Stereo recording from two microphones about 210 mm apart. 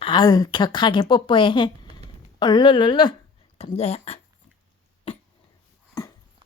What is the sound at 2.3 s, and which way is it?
Speech, 20° left (ahead or behind).